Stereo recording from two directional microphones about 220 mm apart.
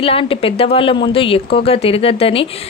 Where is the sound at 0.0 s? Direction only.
25° left (ahead or behind).